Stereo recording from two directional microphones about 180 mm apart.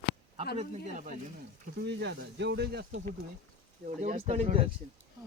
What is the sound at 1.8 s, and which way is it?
Speech, 75° right (ahead or behind).